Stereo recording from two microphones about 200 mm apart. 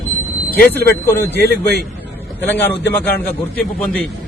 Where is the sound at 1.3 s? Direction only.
55° left (ahead or behind).